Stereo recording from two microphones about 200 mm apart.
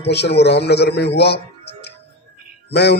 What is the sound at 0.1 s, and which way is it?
A man's voice, 55° left (ahead or behind).